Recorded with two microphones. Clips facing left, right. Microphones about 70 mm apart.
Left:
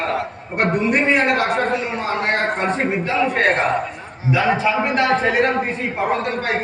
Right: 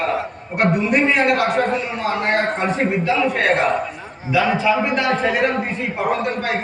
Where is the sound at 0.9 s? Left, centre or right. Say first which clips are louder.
Left 1 dB; left.